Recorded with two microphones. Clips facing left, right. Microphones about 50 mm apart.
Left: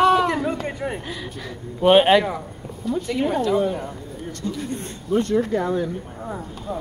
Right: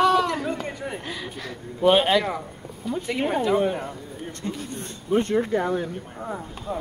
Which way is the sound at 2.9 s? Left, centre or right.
Centre.